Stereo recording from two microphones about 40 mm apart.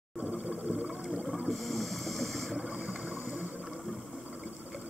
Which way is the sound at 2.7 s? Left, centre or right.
Right.